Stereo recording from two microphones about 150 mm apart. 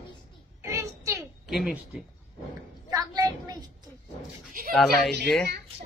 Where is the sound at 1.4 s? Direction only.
Centre (ahead or behind).